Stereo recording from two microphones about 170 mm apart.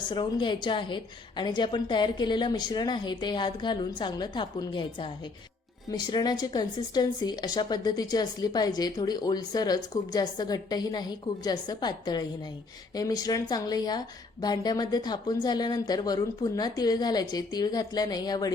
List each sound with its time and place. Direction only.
0.1 s a woman's voice: 25° left (ahead or behind)